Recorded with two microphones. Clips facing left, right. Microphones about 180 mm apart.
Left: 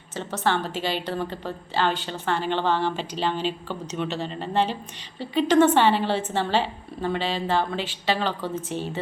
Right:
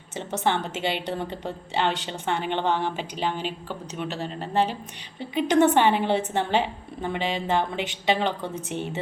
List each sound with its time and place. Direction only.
0.2 s a woman's voice: 20° right (ahead or behind)